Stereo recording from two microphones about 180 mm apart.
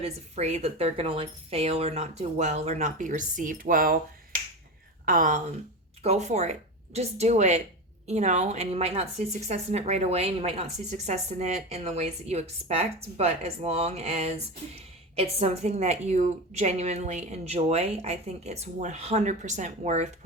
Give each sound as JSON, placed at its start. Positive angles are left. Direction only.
{"t": 0.0, "sound": "a woman's voice", "side_deg": -40}